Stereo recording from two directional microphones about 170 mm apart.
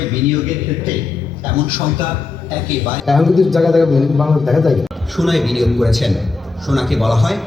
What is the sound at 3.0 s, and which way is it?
A man's voice, centre (ahead or behind).